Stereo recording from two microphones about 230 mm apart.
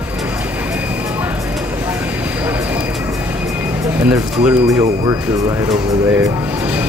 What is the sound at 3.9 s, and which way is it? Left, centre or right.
Speech, centre.